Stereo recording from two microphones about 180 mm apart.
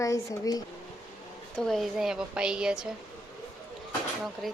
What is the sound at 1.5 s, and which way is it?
A woman's voice, centre (ahead or behind).